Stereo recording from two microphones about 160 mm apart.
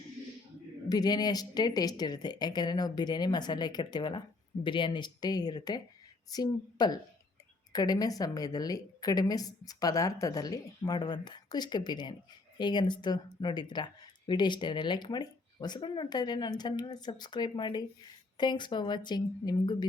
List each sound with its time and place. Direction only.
0.9 s speech: 25° left (ahead or behind)